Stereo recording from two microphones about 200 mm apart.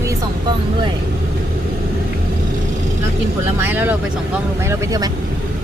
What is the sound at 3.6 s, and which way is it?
Speech, 10° right (ahead or behind).